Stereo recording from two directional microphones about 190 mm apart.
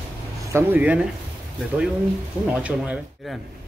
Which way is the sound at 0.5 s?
10° right (ahead or behind).